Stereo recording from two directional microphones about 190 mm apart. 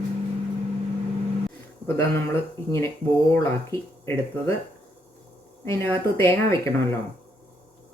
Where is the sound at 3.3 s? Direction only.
15° left (ahead or behind).